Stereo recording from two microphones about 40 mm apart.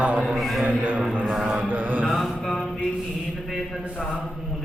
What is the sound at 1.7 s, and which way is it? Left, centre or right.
Mantra, right.